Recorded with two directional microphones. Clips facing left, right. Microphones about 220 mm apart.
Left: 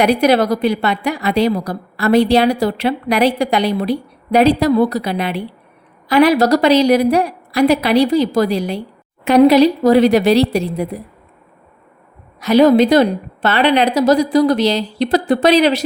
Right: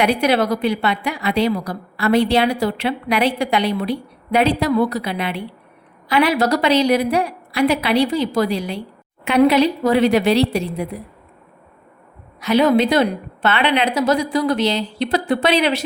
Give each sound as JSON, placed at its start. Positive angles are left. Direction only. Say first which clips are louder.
{"t": 0.0, "sound": "a woman's voice", "louder": "left 4 dB", "side_deg": 40}
{"t": 12.4, "sound": "a woman's voice", "louder": "left 5 dB", "side_deg": 40}